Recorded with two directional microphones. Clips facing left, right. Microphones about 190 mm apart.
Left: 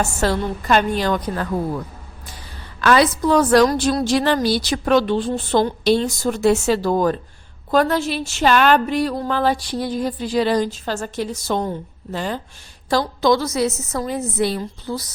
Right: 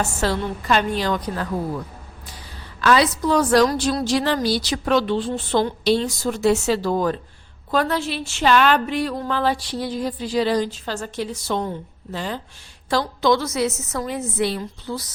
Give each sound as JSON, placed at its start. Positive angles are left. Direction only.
{"t": 0.0, "sound": "a woman's voice", "side_deg": 50}
{"t": 2.8, "sound": "a woman's voice", "side_deg": 50}